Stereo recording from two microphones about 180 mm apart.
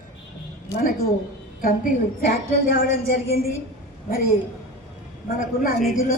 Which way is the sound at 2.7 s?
55° left (ahead or behind).